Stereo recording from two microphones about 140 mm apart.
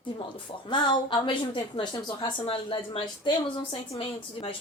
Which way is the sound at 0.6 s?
35° left (ahead or behind).